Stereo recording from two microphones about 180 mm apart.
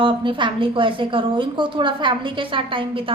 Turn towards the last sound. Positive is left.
turn(degrees=-30)  # may be behind; listen again after turning